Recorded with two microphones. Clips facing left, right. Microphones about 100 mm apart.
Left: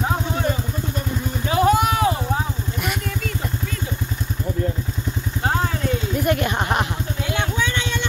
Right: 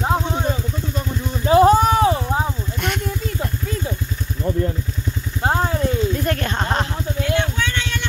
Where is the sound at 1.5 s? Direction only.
30° right (ahead or behind).